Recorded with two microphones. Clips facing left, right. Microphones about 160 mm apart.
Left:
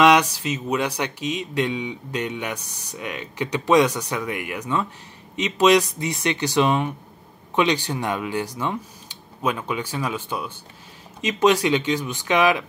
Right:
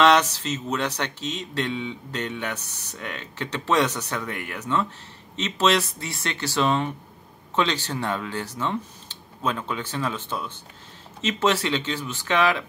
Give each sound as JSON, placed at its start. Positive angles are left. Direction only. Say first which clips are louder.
{"t": 0.0, "sound": "speech", "louder": "left 2 dB", "side_deg": 10}